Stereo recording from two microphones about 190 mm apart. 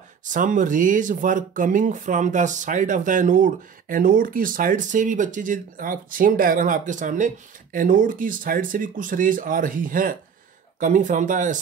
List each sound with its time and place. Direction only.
0.2 s speech: 40° right (ahead or behind)